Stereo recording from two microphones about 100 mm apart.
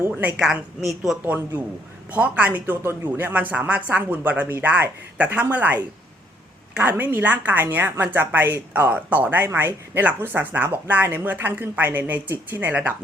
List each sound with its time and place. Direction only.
0.0 s a woman's voice: 20° right (ahead or behind)
0.3 s speech: 5° right (ahead or behind)
1.2 s speech: 15° right (ahead or behind)
6.9 s a woman's voice: 20° right (ahead or behind)